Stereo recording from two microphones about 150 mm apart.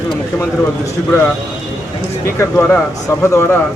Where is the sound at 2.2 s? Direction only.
20° left (ahead or behind).